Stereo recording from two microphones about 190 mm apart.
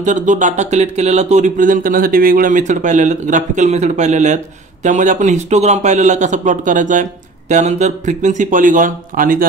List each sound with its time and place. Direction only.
0.0 s a man's voice: 40° right (ahead or behind)